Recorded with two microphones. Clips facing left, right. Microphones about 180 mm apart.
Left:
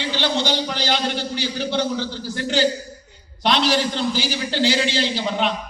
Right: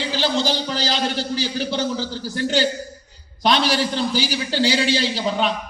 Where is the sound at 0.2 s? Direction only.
35° right (ahead or behind).